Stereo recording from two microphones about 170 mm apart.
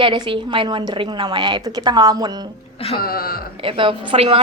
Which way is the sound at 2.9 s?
60° left (ahead or behind).